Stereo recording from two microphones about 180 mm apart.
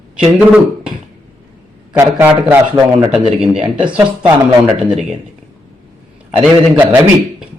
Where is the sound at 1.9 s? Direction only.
10° right (ahead or behind).